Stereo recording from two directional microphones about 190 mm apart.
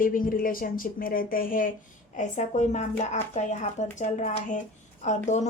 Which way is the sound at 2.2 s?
35° left (ahead or behind).